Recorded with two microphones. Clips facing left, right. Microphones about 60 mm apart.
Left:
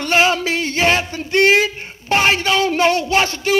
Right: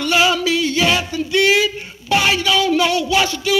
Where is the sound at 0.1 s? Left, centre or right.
Left.